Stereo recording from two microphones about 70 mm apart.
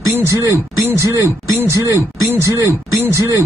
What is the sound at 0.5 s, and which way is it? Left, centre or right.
Speech, right.